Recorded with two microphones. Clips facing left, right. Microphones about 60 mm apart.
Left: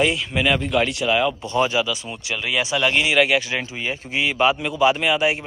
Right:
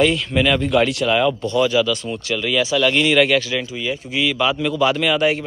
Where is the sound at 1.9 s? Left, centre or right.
Centre.